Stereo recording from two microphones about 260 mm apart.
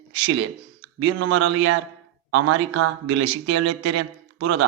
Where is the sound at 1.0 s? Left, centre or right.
Right.